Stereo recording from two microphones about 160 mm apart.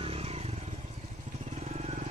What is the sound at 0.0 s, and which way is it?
Vehicle, 40° right (ahead or behind).